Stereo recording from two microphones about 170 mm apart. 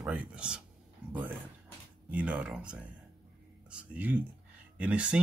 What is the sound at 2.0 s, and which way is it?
Speech, 5° right (ahead or behind).